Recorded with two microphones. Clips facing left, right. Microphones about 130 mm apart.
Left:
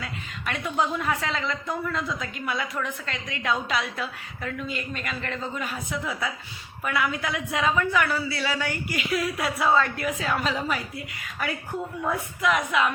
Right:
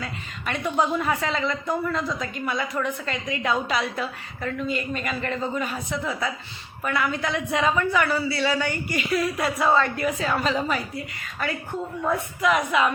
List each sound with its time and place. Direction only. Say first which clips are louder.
0.0 s a woman's voice: right 2 dB; centre (ahead or behind)